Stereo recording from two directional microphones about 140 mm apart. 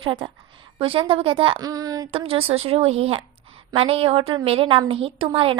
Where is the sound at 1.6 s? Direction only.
25° right (ahead or behind).